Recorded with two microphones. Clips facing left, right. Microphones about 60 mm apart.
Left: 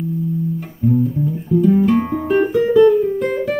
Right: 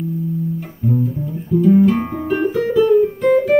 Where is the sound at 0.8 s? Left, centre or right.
Centre.